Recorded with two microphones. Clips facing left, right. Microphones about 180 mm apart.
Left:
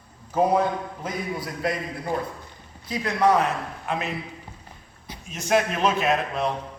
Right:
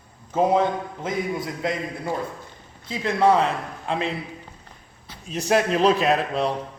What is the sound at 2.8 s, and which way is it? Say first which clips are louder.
A man's voice: right 2 dB; 25° right (ahead or behind).